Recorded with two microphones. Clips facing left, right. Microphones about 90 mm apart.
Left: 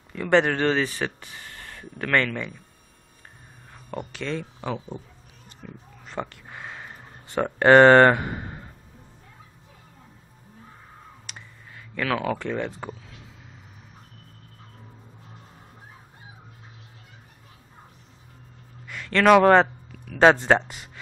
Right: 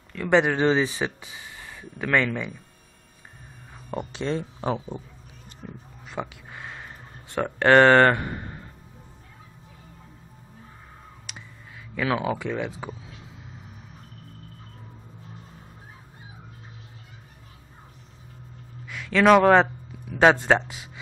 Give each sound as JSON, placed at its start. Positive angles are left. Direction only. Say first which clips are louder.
{"t": 0.3, "sound": "speech", "louder": "even", "side_deg": -5}
{"t": 4.1, "sound": "speech", "louder": "right 3 dB", "side_deg": -30}
{"t": 6.0, "sound": "speech", "louder": "even", "side_deg": -5}
{"t": 11.3, "sound": "a sound", "louder": "right 1 dB", "side_deg": 0}
{"t": 11.9, "sound": "speech", "louder": "even", "side_deg": -10}
{"t": 18.9, "sound": "speech", "louder": "even", "side_deg": -5}